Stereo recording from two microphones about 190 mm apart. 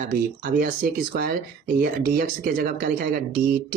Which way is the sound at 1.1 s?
50° right (ahead or behind).